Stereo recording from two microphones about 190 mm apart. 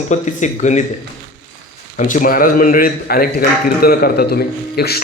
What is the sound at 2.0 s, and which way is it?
A man's voice, 45° left (ahead or behind).